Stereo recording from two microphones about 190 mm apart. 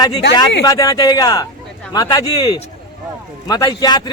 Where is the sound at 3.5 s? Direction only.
20° left (ahead or behind).